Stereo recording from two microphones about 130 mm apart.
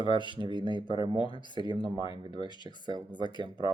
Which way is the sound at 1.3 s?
35° left (ahead or behind).